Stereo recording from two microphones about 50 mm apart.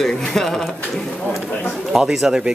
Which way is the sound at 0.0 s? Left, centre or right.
Centre.